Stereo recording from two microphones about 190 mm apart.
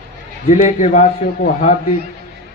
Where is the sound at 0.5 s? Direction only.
40° left (ahead or behind).